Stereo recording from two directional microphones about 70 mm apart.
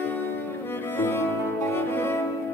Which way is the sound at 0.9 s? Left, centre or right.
Left.